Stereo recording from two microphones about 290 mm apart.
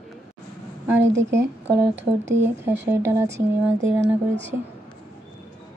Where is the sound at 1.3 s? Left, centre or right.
Centre.